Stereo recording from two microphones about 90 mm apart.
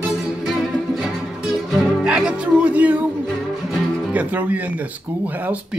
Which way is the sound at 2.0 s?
10° right (ahead or behind).